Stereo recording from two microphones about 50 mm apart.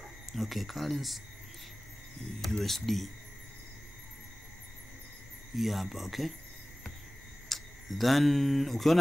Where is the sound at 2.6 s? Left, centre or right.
Centre.